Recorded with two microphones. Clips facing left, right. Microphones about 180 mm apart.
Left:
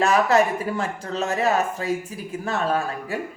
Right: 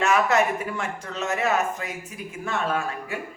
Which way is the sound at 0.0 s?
35° left (ahead or behind).